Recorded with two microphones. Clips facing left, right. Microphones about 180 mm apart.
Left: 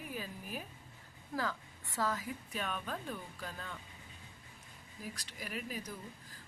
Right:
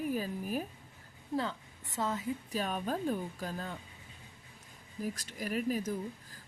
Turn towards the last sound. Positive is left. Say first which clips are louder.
# right 10 dB
turn(degrees=-45)  # may be behind; listen again after turning